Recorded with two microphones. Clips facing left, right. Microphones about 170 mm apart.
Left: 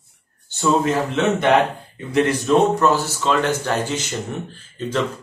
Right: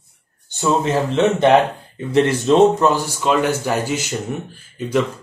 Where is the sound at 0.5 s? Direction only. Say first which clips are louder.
Even; 25° right (ahead or behind).